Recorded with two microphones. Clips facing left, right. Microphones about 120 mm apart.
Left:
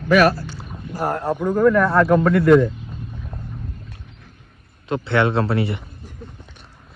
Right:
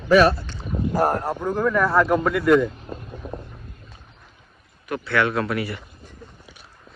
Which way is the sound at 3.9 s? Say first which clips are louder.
Left 5 dB; 80° left.